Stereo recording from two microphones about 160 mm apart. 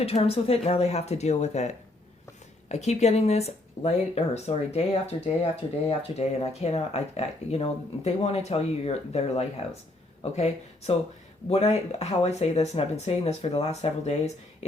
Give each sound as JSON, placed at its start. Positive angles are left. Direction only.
{"t": 0.0, "sound": "speech", "side_deg": 40}